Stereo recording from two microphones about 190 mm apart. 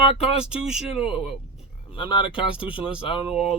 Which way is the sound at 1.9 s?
25° left (ahead or behind).